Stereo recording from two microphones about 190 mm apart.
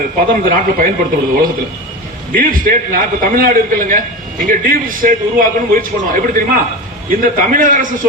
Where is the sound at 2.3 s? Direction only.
45° right (ahead or behind).